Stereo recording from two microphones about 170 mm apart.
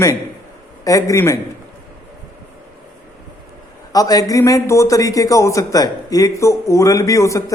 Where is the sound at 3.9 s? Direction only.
20° left (ahead or behind).